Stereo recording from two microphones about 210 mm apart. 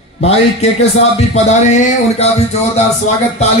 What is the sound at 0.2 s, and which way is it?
A man's voice, 30° left (ahead or behind).